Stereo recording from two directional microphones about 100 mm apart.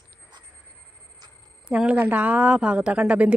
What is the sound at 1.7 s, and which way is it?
Speech, 10° right (ahead or behind).